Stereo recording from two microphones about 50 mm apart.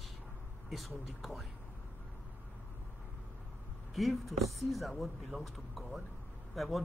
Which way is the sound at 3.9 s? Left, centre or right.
Centre.